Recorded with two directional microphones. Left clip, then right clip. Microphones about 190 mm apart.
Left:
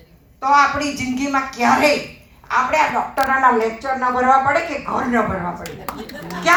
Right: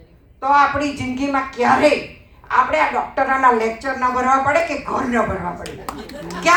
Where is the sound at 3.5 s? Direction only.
45° right (ahead or behind).